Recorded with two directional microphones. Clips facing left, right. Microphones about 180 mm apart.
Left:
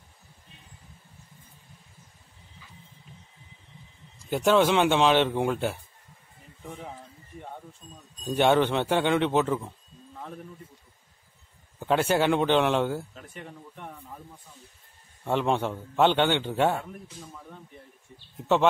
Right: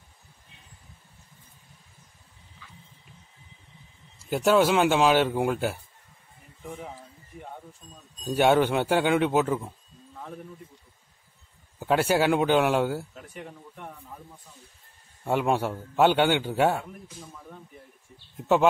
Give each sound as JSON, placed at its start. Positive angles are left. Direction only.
{"t": 4.2, "sound": "speech", "side_deg": -5}
{"t": 7.8, "sound": "speech", "side_deg": 10}
{"t": 8.2, "sound": "speech", "side_deg": -5}
{"t": 10.1, "sound": "a sound", "side_deg": 0}
{"t": 11.8, "sound": "speech", "side_deg": -5}
{"t": 15.2, "sound": "a man's voice", "side_deg": -10}